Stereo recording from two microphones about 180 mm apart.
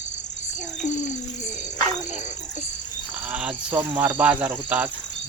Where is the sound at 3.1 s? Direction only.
10° right (ahead or behind).